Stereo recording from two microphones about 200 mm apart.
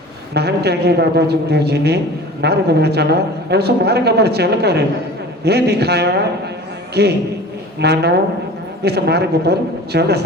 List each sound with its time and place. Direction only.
0.3 s a man's voice: 55° right (ahead or behind)